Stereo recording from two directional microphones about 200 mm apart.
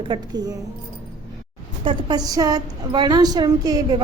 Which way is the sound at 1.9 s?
20° right (ahead or behind).